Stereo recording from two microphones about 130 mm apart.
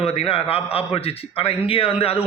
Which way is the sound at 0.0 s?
50° left (ahead or behind).